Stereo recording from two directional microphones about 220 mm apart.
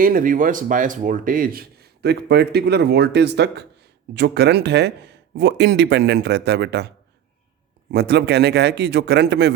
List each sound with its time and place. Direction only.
0.0 s speech: 40° right (ahead or behind)